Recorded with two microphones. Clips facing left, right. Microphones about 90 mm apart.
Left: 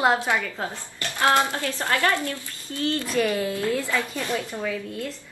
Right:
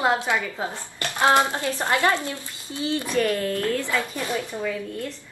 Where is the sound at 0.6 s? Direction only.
20° right (ahead or behind).